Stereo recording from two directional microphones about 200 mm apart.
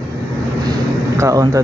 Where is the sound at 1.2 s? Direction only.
15° right (ahead or behind).